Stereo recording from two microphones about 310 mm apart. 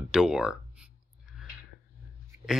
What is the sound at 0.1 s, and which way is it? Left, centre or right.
Speech, centre.